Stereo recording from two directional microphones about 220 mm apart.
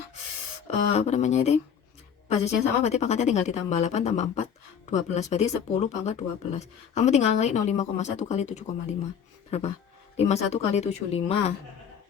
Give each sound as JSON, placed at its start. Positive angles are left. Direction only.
{"t": 0.8, "sound": "speech", "side_deg": 30}
{"t": 2.8, "sound": "speech", "side_deg": 30}